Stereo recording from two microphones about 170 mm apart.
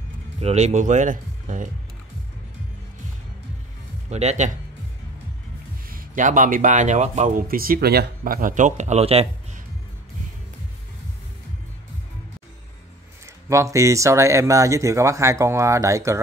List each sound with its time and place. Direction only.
0.4 s speech: 40° right (ahead or behind)
4.1 s speech: 40° right (ahead or behind)
5.9 s a man's voice: 55° right (ahead or behind)
7.4 s speech: 60° right (ahead or behind); by 9.3 s 35° right (ahead or behind)
13.5 s speech: 15° right (ahead or behind)